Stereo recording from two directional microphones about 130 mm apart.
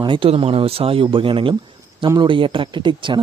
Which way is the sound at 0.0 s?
40° right (ahead or behind).